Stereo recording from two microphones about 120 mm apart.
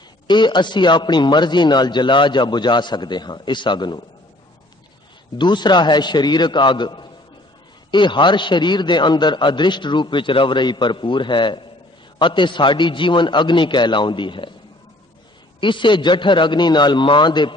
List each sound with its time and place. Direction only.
0.3 s a man's voice: 40° left (ahead or behind)
5.4 s a man's voice: 40° left (ahead or behind)
15.6 s a man's voice: 40° left (ahead or behind)